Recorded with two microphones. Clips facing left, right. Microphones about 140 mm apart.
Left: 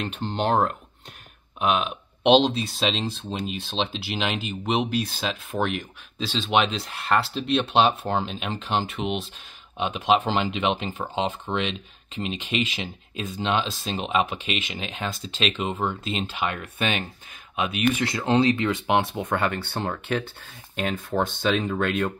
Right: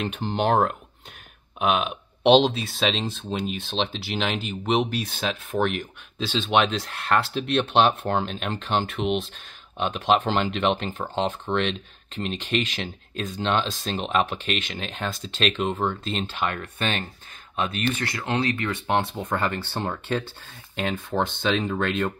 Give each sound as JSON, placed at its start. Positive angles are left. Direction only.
{"t": 0.0, "sound": "speech", "side_deg": -5}
{"t": 1.6, "sound": "speech", "side_deg": 0}
{"t": 19.2, "sound": "speech", "side_deg": 0}